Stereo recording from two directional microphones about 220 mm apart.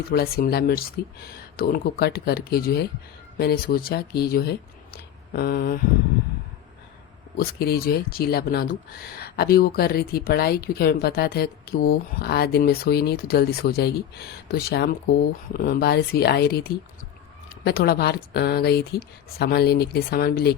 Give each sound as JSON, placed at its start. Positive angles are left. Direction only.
{"t": 0.1, "sound": "speech", "side_deg": 45}
{"t": 4.9, "sound": "a sound", "side_deg": 45}
{"t": 7.3, "sound": "speech", "side_deg": 45}